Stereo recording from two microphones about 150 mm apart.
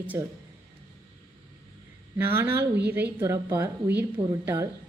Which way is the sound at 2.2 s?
15° right (ahead or behind).